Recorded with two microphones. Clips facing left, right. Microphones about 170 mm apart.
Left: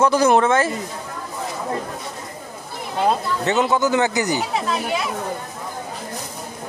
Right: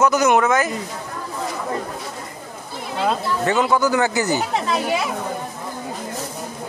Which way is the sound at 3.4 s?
20° left (ahead or behind).